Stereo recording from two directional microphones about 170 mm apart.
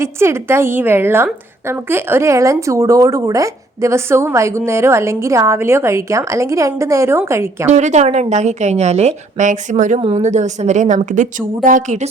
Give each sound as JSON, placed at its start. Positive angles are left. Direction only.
{"t": 0.0, "sound": "a woman's voice", "side_deg": -15}
{"t": 7.7, "sound": "a woman's voice", "side_deg": -45}